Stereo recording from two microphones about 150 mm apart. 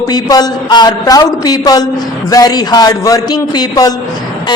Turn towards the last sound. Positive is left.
turn(degrees=25)  # may be behind; listen again after turning